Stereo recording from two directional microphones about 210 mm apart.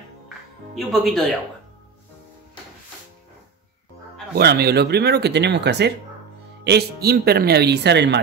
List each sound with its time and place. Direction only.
0.7 s speech: centre (ahead or behind)
4.4 s speech: 50° right (ahead or behind)